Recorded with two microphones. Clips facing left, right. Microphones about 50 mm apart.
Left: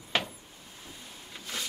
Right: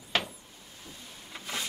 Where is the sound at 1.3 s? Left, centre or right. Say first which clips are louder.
Right 2 dB; centre.